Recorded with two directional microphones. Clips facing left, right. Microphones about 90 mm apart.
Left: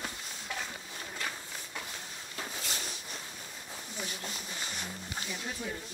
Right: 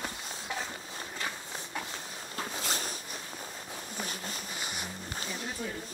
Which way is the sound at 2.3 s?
40° right (ahead or behind).